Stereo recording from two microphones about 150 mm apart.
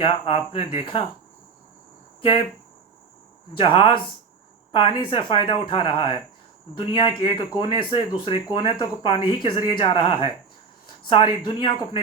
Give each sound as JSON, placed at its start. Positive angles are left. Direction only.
{"t": 0.0, "sound": "speech", "side_deg": 35}
{"t": 3.6, "sound": "speech", "side_deg": 35}